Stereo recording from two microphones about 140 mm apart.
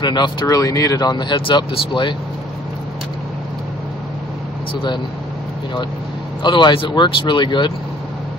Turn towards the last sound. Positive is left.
turn(degrees=35)  # may be behind; listen again after turning